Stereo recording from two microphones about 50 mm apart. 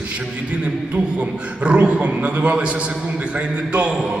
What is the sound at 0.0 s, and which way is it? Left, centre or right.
A man's voice, right.